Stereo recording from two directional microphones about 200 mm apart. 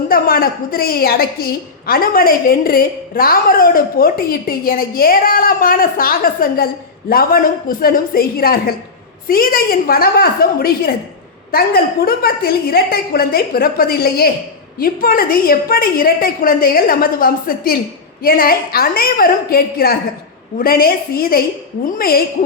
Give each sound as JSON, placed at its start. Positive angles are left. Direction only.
{"t": 0.1, "sound": "a woman's voice", "side_deg": 45}